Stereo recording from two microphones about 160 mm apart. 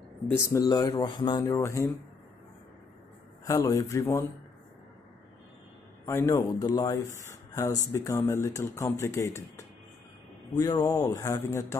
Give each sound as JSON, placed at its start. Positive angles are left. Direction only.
{"t": 0.3, "sound": "speech", "side_deg": 20}
{"t": 1.4, "sound": "speech", "side_deg": 15}
{"t": 3.4, "sound": "speech", "side_deg": 20}
{"t": 6.0, "sound": "speech", "side_deg": 15}